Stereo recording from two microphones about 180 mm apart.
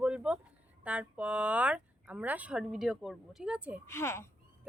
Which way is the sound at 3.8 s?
15° left (ahead or behind).